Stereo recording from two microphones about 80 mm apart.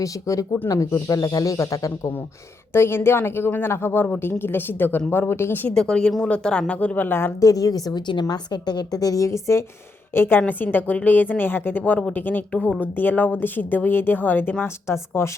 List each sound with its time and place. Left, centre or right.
0.0 s speech: left
2.7 s speech: left
5.7 s a woman's voice: centre; by 7.3 s left
7.4 s speech: left
10.2 s speech: left